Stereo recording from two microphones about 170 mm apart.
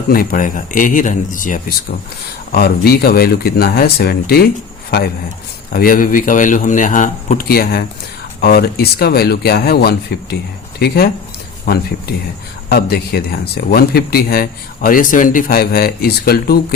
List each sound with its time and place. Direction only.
0.1 s a man's voice: 60° left (ahead or behind)
2.5 s speech: 65° left (ahead or behind)
5.7 s a man's voice: 55° left (ahead or behind)